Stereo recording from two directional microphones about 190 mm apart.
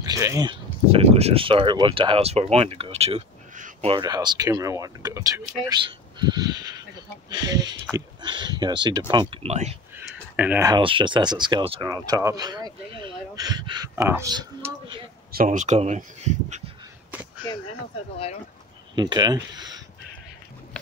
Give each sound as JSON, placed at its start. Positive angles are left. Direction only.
{"t": 0.0, "sound": "speech", "side_deg": -20}
{"t": 3.9, "sound": "speech", "side_deg": -20}
{"t": 9.9, "sound": "a sound", "side_deg": -10}
{"t": 10.7, "sound": "speech", "side_deg": -25}
{"t": 15.3, "sound": "speech", "side_deg": -40}
{"t": 18.9, "sound": "speech", "side_deg": -20}